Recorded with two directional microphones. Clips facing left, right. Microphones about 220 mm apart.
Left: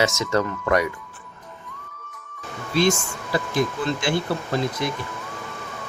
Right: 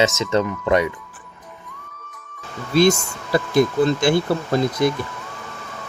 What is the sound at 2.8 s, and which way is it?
Speech, 40° right (ahead or behind).